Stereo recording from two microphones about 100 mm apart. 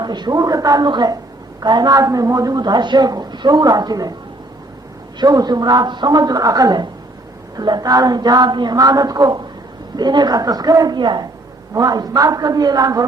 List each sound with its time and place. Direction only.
0.0 s a woman's voice: 45° right (ahead or behind)
5.2 s a woman's voice: 40° right (ahead or behind)
11.7 s a woman's voice: 35° right (ahead or behind)